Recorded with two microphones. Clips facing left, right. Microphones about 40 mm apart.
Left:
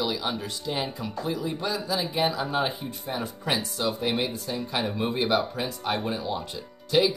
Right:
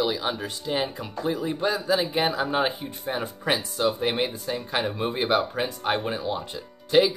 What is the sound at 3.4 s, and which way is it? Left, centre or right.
Speech, centre.